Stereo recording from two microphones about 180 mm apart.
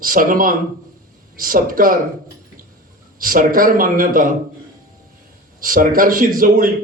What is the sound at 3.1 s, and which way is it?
Speech, 50° right (ahead or behind).